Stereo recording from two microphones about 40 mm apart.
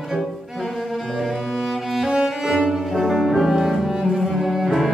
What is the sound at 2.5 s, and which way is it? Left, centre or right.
Cello, centre.